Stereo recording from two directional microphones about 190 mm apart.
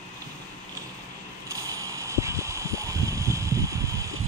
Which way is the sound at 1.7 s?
15° right (ahead or behind).